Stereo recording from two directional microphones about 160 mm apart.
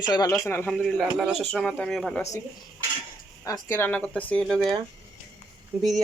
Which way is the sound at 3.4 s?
20° left (ahead or behind).